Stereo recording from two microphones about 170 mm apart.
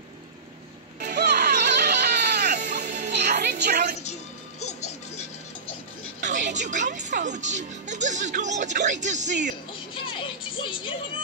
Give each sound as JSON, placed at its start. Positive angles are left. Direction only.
{"t": 1.3, "sound": "music", "side_deg": -55}
{"t": 1.9, "sound": "baby cry", "side_deg": -75}
{"t": 2.4, "sound": "music", "side_deg": -45}
{"t": 3.3, "sound": "music", "side_deg": -70}
{"t": 4.0, "sound": "music", "side_deg": 40}
{"t": 6.2, "sound": "music", "side_deg": -45}
{"t": 6.7, "sound": "speech", "side_deg": -45}
{"t": 9.7, "sound": "music", "side_deg": 30}